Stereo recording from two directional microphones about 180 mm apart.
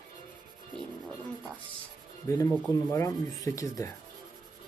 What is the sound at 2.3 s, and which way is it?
Speech, 15° left (ahead or behind).